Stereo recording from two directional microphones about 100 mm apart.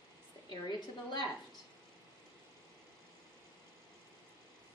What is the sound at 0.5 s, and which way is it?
Speech, 45° left (ahead or behind).